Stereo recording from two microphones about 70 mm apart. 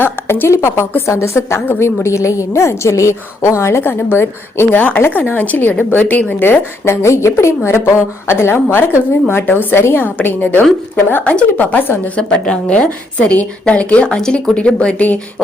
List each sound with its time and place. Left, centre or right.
0.0 s a woman's voice: left